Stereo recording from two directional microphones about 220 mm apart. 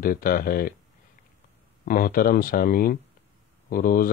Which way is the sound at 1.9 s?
40° left (ahead or behind).